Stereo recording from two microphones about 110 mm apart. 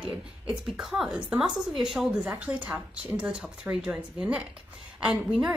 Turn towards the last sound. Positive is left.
turn(degrees=-5)  # may be behind; listen again after turning